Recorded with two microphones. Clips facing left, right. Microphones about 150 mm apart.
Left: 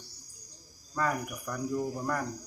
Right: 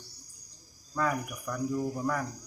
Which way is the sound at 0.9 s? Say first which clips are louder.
Right 1 dB; centre (ahead or behind).